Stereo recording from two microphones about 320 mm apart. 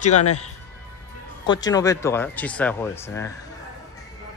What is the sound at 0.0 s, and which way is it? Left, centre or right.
Speech, left.